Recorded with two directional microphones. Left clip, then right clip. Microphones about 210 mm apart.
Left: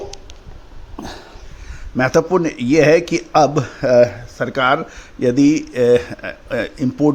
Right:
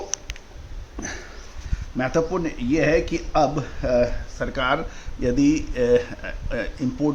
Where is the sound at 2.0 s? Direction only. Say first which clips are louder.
Left 8 dB; 45° left (ahead or behind).